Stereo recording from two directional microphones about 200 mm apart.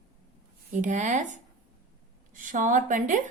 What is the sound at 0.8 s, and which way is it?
Speech, 35° right (ahead or behind).